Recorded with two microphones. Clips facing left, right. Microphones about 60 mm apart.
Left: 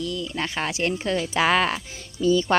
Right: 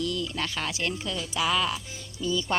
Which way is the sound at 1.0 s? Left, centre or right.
Left.